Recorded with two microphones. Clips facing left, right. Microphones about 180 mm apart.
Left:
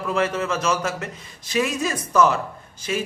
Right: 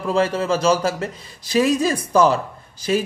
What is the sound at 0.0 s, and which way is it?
A man's voice, 30° right (ahead or behind).